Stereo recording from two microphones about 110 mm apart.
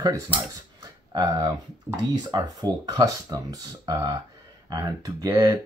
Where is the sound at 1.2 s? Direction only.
35° right (ahead or behind).